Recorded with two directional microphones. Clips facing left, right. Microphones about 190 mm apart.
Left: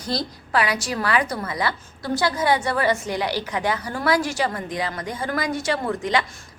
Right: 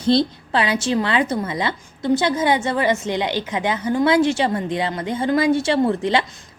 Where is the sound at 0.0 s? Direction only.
25° right (ahead or behind).